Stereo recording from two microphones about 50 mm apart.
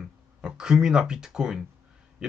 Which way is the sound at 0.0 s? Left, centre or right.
Centre.